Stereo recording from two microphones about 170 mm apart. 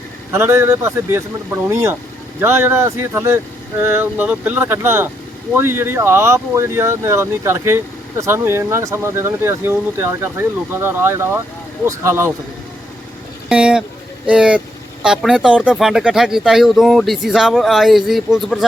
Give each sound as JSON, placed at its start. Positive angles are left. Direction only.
{"t": 0.3, "sound": "speech", "side_deg": -15}
{"t": 13.5, "sound": "speech", "side_deg": -5}